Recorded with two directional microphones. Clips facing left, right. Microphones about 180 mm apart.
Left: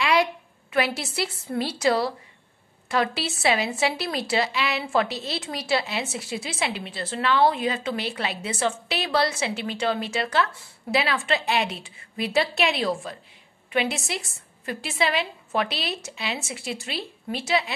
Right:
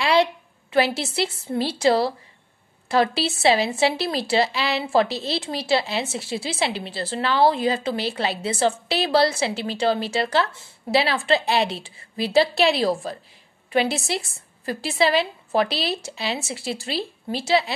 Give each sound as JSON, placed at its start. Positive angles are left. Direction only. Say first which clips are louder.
{"t": 0.0, "sound": "a woman's voice", "louder": "right 3 dB", "side_deg": -30}